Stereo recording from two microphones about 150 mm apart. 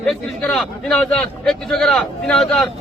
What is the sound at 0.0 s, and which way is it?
A man's voice, 5° left (ahead or behind).